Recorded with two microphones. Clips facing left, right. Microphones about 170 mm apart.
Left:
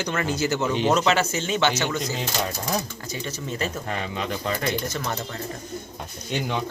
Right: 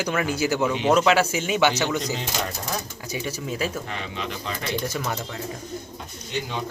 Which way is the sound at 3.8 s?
45° left (ahead or behind).